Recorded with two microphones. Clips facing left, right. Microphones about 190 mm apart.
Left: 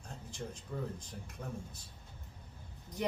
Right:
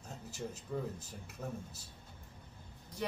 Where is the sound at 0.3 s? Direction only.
5° right (ahead or behind).